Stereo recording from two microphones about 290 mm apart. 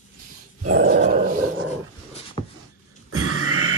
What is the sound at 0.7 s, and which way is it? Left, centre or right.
Dog, right.